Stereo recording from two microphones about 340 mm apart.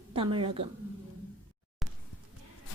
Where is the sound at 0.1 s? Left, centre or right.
Centre.